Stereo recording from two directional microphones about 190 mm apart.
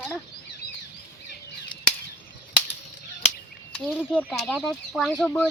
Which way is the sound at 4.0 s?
10° left (ahead or behind).